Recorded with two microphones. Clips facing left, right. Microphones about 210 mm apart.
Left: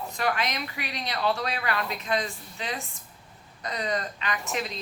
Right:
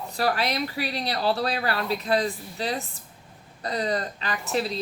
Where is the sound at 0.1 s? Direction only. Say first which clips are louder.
Right 4 dB; 35° right (ahead or behind).